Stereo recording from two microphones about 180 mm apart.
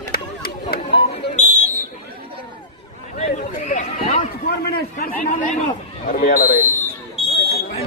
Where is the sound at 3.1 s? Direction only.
40° left (ahead or behind).